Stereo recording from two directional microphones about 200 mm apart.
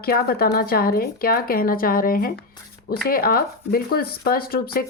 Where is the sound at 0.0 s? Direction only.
50° left (ahead or behind).